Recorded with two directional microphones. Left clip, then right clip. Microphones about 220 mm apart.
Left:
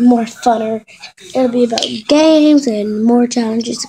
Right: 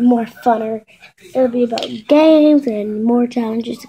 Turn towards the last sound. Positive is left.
turn(degrees=0)  # may be behind; listen again after turning